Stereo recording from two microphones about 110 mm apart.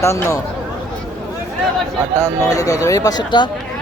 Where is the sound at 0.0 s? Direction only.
25° left (ahead or behind).